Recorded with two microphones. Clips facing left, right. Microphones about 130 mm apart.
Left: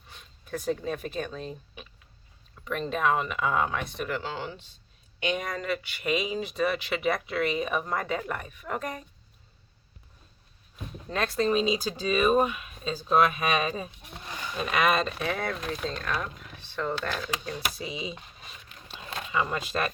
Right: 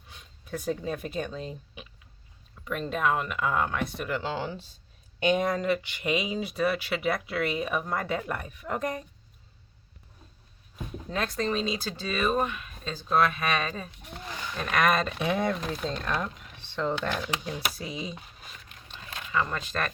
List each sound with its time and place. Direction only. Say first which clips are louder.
0.1 s speech: left 1 dB; 10° right (ahead or behind)
4.2 s speech: right 3 dB; 30° right (ahead or behind)
6.0 s speech: even; 15° right (ahead or behind)
11.1 s speech: left 3 dB; centre (ahead or behind)
15.3 s speech: right 3 dB; 15° right (ahead or behind)
17.5 s a sound: even; centre (ahead or behind)
19.3 s speech: left 1 dB; 10° left (ahead or behind)